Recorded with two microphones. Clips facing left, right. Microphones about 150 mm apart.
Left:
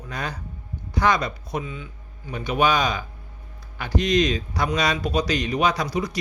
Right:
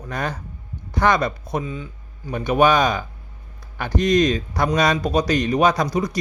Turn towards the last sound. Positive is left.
turn(degrees=-45)  # may be behind; listen again after turning